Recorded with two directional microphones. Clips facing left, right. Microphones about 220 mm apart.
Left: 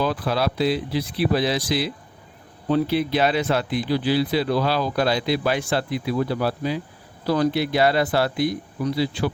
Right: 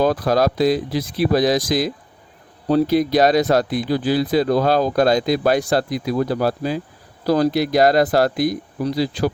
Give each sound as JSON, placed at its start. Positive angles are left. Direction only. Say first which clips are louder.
{"t": 0.0, "sound": "speech", "louder": "right 6 dB", "side_deg": -45}